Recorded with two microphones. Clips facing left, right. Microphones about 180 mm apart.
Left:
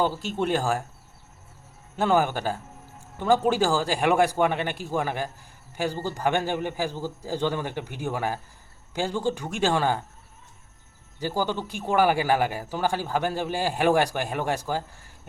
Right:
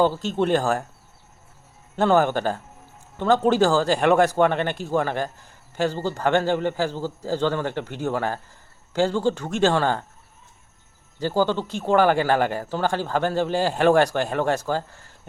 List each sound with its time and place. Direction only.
0.0 s speech: 10° left (ahead or behind)
2.0 s speech: 10° left (ahead or behind)
11.2 s speech: 10° left (ahead or behind)